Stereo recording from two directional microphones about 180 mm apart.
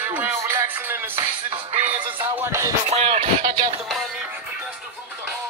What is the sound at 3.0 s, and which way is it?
Speech, 30° right (ahead or behind).